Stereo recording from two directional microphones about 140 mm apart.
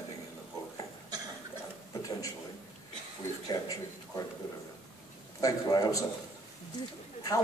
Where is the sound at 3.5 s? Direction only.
25° left (ahead or behind).